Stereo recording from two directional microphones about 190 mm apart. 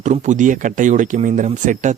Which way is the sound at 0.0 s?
40° right (ahead or behind).